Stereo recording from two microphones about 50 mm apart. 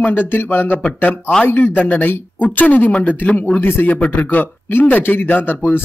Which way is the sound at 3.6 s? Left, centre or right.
Left.